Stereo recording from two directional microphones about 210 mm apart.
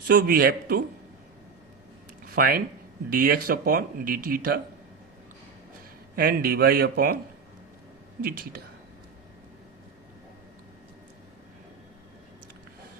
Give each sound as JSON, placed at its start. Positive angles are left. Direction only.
{"t": 0.1, "sound": "speech", "side_deg": -45}
{"t": 2.2, "sound": "speech", "side_deg": -45}
{"t": 6.1, "sound": "speech", "side_deg": -45}
{"t": 8.2, "sound": "speech", "side_deg": -45}